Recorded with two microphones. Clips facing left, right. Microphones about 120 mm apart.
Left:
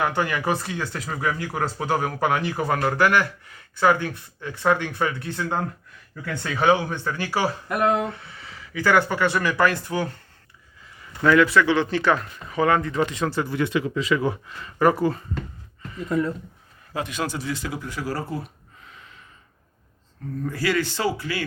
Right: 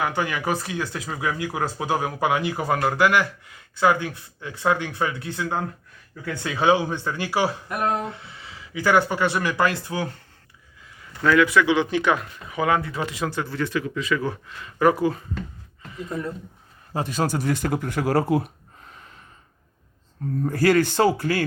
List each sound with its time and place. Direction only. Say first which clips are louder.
0.0 s speech: left 1 dB; 5° right (ahead or behind)
11.6 s speech: even; 15° right (ahead or behind)
13.4 s a man's voice: left 3 dB; 15° left (ahead or behind)
14.4 s speech: even; centre (ahead or behind)
16.0 s a man's voice: left 6 dB; 90° left
16.9 s speech: right 3 dB; 35° right (ahead or behind); by 18.5 s 65° right (ahead or behind)
18.8 s gasp: right 1 dB; 45° right (ahead or behind)
20.4 s speech: right 5 dB; 45° right (ahead or behind)